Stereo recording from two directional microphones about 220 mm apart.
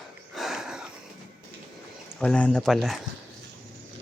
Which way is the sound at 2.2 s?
5° left (ahead or behind).